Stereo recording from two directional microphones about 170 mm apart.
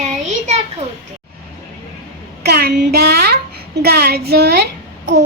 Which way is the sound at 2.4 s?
65° right (ahead or behind).